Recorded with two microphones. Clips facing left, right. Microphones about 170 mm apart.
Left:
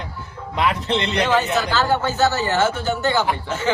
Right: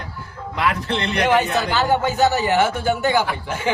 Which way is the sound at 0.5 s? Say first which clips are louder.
Left 2 dB; 20° left (ahead or behind).